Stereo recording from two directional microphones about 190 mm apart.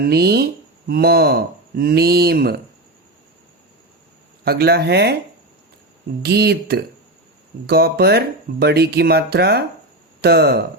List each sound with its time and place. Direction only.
0.0 s speech: 55° right (ahead or behind)
4.4 s speech: 55° right (ahead or behind)
6.2 s speech: 60° right (ahead or behind)